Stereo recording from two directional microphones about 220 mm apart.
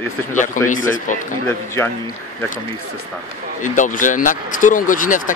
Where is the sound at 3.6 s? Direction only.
35° left (ahead or behind).